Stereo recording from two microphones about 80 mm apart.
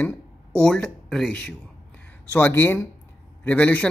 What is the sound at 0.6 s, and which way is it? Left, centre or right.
Speech, centre.